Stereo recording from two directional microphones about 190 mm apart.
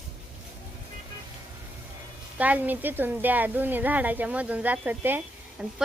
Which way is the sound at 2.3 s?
10° right (ahead or behind).